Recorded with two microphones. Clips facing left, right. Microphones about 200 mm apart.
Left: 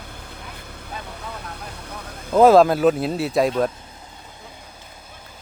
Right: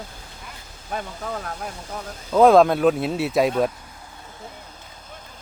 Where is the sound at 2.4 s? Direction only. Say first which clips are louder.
Left 1 dB; centre (ahead or behind).